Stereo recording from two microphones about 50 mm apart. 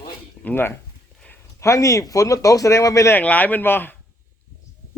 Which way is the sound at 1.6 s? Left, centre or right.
Left.